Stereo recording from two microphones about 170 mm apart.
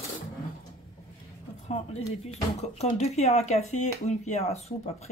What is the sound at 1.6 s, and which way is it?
Speech, 35° left (ahead or behind).